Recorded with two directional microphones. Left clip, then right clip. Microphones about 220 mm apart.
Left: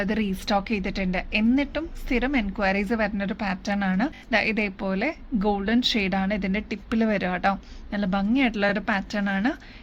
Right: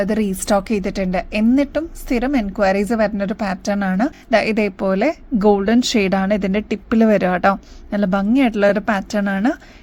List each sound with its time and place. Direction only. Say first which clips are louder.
0.0 s a woman's voice: right 7 dB; 40° right (ahead or behind)